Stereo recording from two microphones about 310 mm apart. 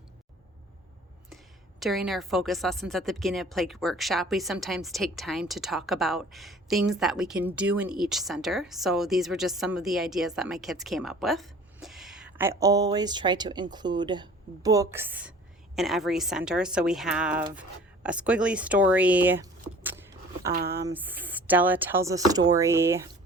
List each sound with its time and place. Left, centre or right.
1.8 s speech: centre